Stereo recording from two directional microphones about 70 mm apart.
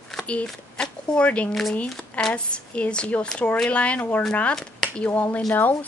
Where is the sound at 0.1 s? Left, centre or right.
Centre.